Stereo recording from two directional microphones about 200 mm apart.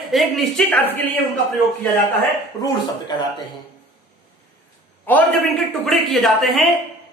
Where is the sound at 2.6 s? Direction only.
20° left (ahead or behind).